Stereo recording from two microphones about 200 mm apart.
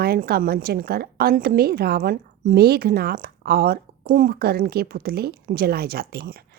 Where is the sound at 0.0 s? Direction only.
50° right (ahead or behind).